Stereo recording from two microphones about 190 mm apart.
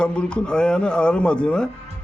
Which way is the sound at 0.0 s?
5° left (ahead or behind).